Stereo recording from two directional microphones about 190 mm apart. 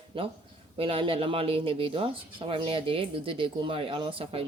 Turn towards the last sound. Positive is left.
turn(degrees=-30)  # may be behind; listen again after turning